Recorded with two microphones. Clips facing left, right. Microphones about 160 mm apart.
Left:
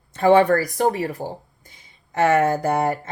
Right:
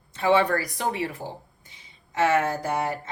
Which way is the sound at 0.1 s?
50° left (ahead or behind).